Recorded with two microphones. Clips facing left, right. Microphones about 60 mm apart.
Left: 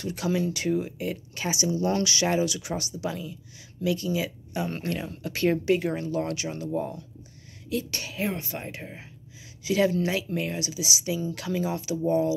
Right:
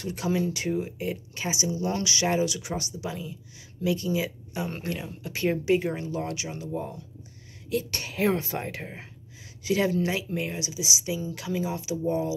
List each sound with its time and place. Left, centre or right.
0.0 s speech: right
4.6 s speech: centre
7.7 s speech: right
8.5 s speech: right
9.7 s speech: right